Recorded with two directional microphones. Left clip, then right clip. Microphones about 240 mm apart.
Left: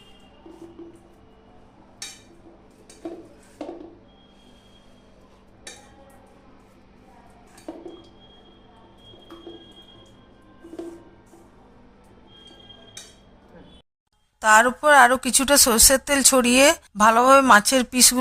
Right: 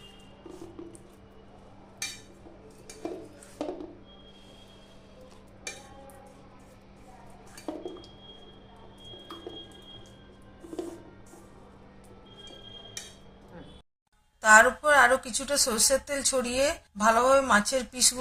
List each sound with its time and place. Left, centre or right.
14.4 s speech: left